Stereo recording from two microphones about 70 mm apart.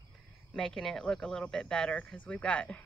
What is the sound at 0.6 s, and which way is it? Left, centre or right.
A woman's voice, centre.